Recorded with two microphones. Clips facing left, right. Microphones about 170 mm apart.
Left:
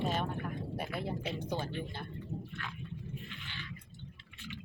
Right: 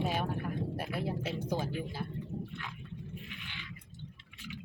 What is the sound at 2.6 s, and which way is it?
Speech, 15° right (ahead or behind).